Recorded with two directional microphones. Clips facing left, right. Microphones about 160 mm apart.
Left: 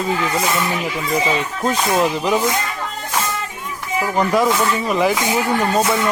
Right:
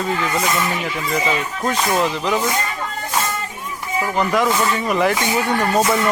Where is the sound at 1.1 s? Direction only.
10° left (ahead or behind).